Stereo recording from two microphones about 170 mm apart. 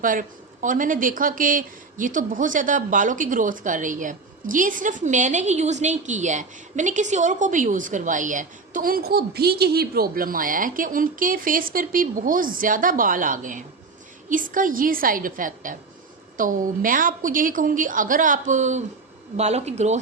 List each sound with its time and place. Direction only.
0.0 s speech: 50° right (ahead or behind)